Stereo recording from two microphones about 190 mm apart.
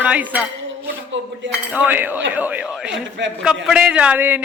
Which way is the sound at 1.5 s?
5° right (ahead or behind).